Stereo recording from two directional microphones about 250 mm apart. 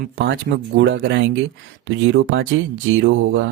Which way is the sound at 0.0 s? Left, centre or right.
Right.